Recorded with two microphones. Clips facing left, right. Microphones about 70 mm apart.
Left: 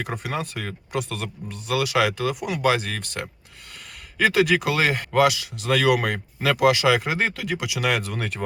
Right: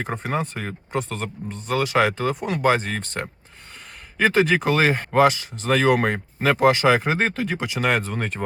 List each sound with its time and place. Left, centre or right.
0.0 s speech: right
1.5 s speech: centre
1.8 s speech: right